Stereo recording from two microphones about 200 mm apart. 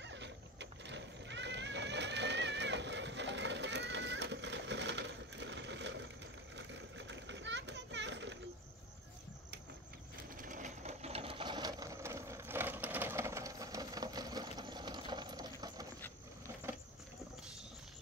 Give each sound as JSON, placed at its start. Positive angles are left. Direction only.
{"t": 0.0, "sound": "horse", "side_deg": -60}
{"t": 6.5, "sound": "a sound", "side_deg": -65}
{"t": 10.3, "sound": "sewing machine", "side_deg": -40}